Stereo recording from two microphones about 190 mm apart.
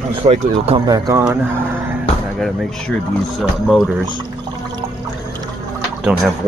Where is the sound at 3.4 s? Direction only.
Centre (ahead or behind).